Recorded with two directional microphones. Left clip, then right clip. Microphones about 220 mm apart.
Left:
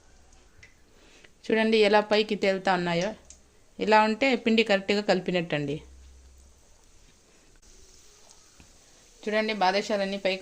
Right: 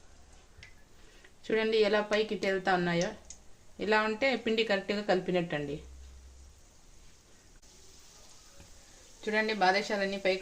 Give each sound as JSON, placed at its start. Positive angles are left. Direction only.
{"t": 1.4, "sound": "speech", "side_deg": 45}
{"t": 9.2, "sound": "a woman's voice", "side_deg": 35}